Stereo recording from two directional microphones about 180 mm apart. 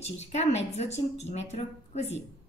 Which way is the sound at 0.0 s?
35° left (ahead or behind).